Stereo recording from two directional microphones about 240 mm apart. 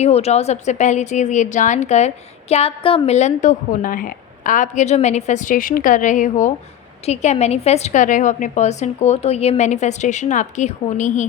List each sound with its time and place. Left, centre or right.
0.0 s a woman's voice: left